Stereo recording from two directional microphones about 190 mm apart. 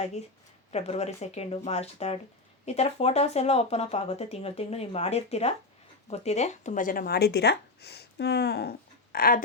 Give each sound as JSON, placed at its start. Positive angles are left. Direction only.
{"t": 0.7, "sound": "speech", "side_deg": 35}